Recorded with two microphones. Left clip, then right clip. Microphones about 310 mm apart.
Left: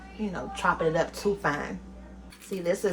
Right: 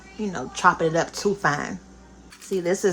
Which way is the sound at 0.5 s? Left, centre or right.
Right.